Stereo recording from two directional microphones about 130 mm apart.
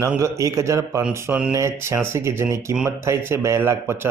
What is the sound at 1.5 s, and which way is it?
Speech, 20° right (ahead or behind).